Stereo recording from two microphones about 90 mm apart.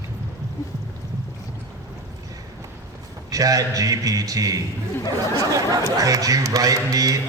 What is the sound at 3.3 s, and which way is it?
A man's voice, 40° right (ahead or behind).